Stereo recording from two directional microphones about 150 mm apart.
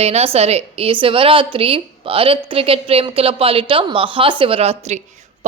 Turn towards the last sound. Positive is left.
turn(degrees=-45)  # may be behind; listen again after turning